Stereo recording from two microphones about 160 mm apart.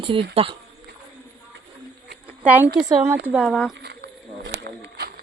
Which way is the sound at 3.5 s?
Centre (ahead or behind).